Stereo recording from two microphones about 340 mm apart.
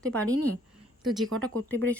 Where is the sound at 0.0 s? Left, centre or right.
Centre.